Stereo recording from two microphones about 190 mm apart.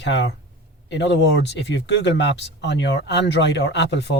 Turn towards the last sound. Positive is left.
turn(degrees=65)  # may be behind; listen again after turning